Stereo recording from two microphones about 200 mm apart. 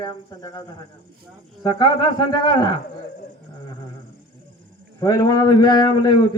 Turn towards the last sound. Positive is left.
turn(degrees=20)  # may be behind; listen again after turning